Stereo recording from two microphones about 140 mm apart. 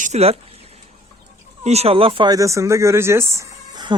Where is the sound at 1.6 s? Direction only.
50° right (ahead or behind).